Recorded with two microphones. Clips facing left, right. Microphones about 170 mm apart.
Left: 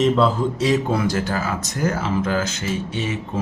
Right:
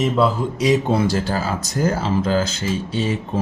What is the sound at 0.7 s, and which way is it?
Speech, 25° right (ahead or behind).